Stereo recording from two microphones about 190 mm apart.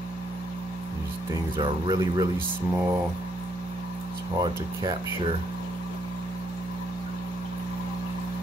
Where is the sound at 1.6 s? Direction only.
20° right (ahead or behind).